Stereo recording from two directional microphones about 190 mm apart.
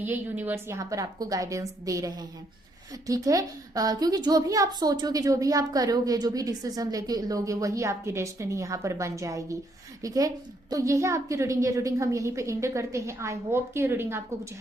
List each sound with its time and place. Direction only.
0.0 s a woman's voice: 10° right (ahead or behind)